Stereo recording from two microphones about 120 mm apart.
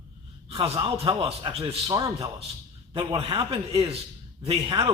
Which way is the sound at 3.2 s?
50° right (ahead or behind).